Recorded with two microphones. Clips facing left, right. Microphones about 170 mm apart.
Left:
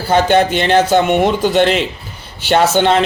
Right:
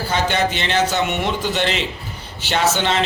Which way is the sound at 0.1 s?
50° left (ahead or behind).